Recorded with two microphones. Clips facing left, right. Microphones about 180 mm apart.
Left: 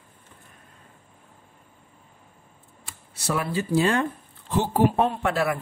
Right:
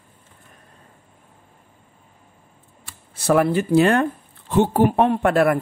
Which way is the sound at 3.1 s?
55° right (ahead or behind).